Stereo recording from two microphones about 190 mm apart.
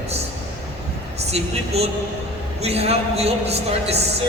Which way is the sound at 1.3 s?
35° right (ahead or behind).